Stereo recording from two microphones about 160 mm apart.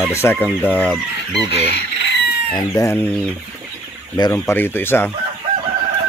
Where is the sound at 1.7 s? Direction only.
90° left.